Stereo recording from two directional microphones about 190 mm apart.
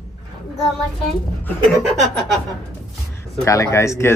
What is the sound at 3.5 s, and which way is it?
Speech, 15° left (ahead or behind).